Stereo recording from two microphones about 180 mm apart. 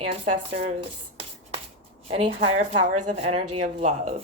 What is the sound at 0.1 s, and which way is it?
A woman's voice, 45° right (ahead or behind).